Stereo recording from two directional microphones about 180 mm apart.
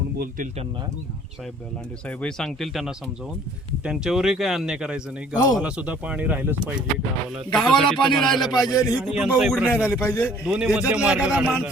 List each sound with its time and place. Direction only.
2.0 s a man's voice: 5° left (ahead or behind)
7.3 s a man's voice: centre (ahead or behind)
8.7 s speech: 20° left (ahead or behind)
9.0 s a man's voice: 5° right (ahead or behind)
10.0 s a man's voice: 15° left (ahead or behind)
10.4 s a man's voice: 5° right (ahead or behind)